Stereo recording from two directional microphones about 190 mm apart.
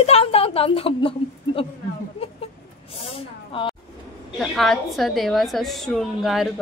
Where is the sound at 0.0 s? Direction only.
30° left (ahead or behind).